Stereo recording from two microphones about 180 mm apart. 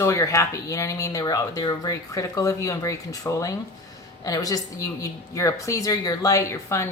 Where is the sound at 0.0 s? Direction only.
15° left (ahead or behind).